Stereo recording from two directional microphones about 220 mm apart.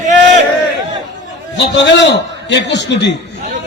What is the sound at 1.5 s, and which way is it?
A man's voice, 55° left (ahead or behind).